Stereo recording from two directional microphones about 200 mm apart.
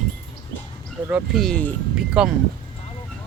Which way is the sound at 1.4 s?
5° left (ahead or behind).